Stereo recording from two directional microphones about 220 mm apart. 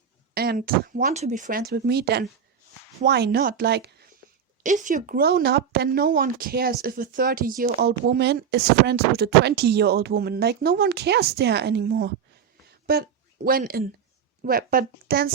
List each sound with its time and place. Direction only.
0.3 s speech: 45° right (ahead or behind)
4.6 s speech: 35° right (ahead or behind)